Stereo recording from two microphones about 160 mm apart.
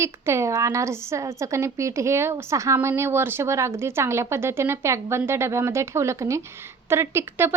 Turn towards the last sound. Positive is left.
turn(degrees=-15)  # may be behind; listen again after turning